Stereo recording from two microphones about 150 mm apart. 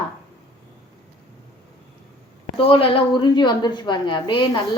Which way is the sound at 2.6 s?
40° left (ahead or behind).